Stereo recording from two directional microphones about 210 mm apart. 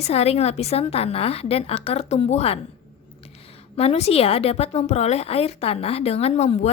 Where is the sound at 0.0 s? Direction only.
30° left (ahead or behind).